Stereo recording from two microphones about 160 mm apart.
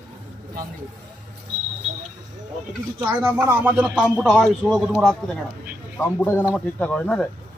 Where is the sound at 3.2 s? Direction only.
20° right (ahead or behind).